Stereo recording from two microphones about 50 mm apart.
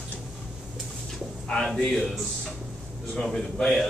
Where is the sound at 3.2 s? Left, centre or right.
Centre.